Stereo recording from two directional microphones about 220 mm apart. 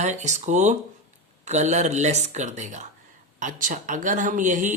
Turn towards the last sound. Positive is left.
turn(degrees=-35)  # may be behind; listen again after turning